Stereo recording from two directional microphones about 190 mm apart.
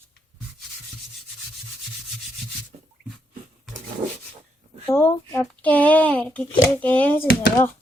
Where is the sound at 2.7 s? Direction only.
40° right (ahead or behind).